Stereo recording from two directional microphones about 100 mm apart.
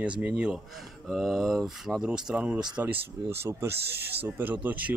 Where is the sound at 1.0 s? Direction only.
Centre (ahead or behind).